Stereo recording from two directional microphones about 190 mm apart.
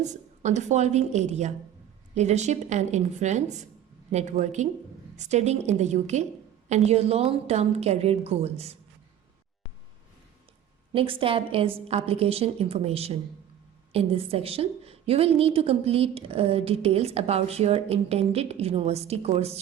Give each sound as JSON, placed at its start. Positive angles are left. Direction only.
{"t": 0.0, "sound": "a woman's voice", "side_deg": -40}
{"t": 10.9, "sound": "a woman's voice", "side_deg": -30}